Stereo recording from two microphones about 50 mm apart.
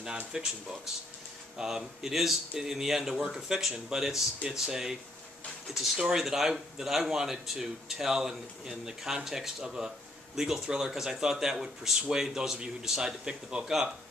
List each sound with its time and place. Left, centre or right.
0.0 s a man's voice: centre
5.9 s a man's voice: centre
6.2 s a man's voice: centre